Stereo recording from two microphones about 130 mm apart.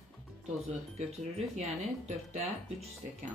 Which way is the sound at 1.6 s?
55° right (ahead or behind).